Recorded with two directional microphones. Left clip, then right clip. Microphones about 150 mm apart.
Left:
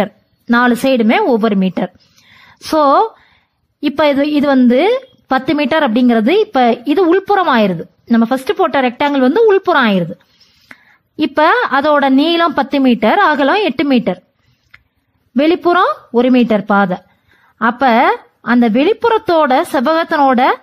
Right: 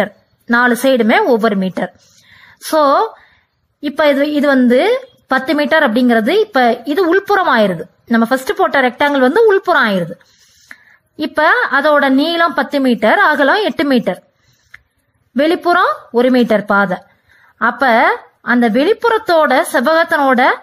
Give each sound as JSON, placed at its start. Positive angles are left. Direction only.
{"t": 0.0, "sound": "a woman's voice", "side_deg": 25}
{"t": 2.3, "sound": "a sound", "side_deg": 30}
{"t": 3.8, "sound": "a woman's voice", "side_deg": 35}
{"t": 10.7, "sound": "a woman's voice", "side_deg": 30}
{"t": 15.3, "sound": "a woman's voice", "side_deg": 25}